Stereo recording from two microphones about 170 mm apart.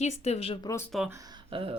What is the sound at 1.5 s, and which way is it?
Speech, 30° right (ahead or behind).